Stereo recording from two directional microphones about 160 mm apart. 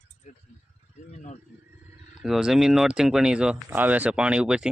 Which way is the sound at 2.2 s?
5° right (ahead or behind).